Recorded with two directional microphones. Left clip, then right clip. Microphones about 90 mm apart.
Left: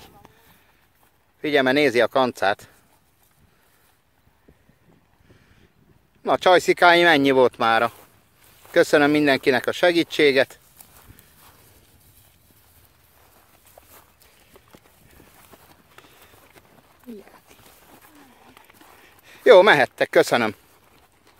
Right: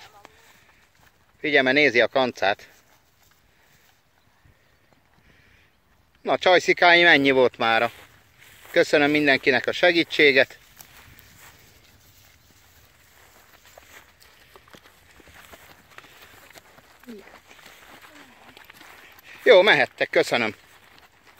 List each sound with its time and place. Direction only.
0.2 s a sound: 30° right (ahead or behind)
1.4 s speech: 45° left (ahead or behind)
6.2 s speech: 45° left (ahead or behind)
8.7 s speech: 55° left (ahead or behind); by 10.6 s 35° left (ahead or behind)
13.8 s walk: centre (ahead or behind)
18.7 s a sound: 20° left (ahead or behind)
19.2 s speech: 60° left (ahead or behind); by 20.5 s 80° left